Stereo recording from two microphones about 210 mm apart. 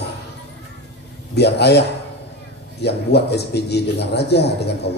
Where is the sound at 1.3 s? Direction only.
50° left (ahead or behind).